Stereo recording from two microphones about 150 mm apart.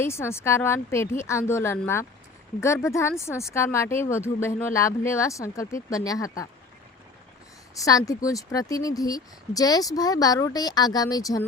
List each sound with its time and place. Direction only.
0.0 s speech: 15° left (ahead or behind)
7.8 s speech: 20° left (ahead or behind)